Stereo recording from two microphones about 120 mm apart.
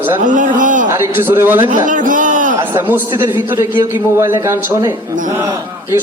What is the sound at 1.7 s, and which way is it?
Speech, 90° right.